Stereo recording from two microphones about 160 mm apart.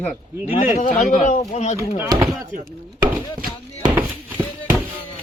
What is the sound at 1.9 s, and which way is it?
Speech, 15° right (ahead or behind).